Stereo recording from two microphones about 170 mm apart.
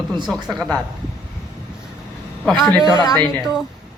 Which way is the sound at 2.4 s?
Centre (ahead or behind).